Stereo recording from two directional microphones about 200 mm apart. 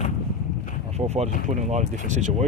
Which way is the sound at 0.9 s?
30° right (ahead or behind).